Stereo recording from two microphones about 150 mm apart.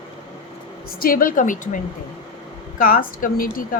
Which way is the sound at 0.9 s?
70° left (ahead or behind).